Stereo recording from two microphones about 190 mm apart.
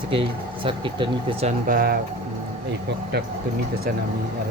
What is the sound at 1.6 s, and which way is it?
Speech, 50° right (ahead or behind).